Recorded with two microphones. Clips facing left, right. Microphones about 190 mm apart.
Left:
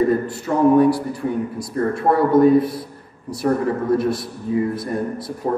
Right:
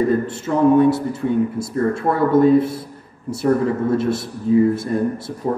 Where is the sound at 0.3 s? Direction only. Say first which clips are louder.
Even; 25° right (ahead or behind).